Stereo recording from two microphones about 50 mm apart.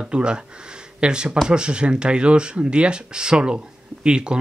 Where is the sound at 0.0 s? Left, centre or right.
Centre.